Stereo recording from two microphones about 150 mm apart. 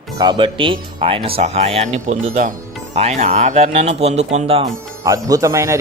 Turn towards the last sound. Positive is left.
turn(degrees=-20)  # may be behind; listen again after turning